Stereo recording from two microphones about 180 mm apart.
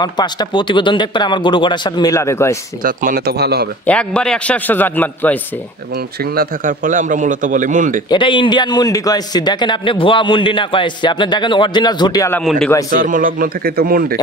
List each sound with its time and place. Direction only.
0.0 s a man's voice: 25° left (ahead or behind)
2.8 s speech: 50° right (ahead or behind)
3.8 s a man's voice: 5° left (ahead or behind)
6.3 s a man's voice: 45° right (ahead or behind)
8.1 s a man's voice: 25° left (ahead or behind)
12.4 s a man's voice: 5° left (ahead or behind)
12.9 s a man's voice: 50° right (ahead or behind)